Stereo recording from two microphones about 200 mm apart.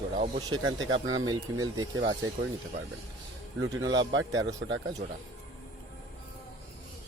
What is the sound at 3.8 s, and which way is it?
Speech, 65° right (ahead or behind).